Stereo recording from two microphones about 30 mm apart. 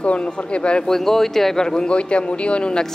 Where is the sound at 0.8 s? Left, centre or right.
Centre.